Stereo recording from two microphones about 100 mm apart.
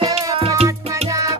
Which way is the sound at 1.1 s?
35° right (ahead or behind).